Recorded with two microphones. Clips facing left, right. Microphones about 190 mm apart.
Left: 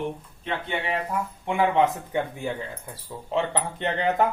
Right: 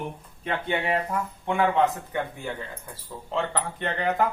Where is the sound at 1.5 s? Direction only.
15° left (ahead or behind).